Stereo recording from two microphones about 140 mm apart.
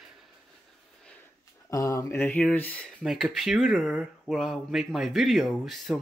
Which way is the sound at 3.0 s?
Centre (ahead or behind).